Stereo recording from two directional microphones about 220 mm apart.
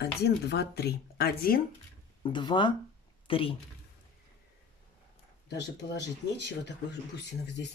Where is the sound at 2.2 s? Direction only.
20° left (ahead or behind).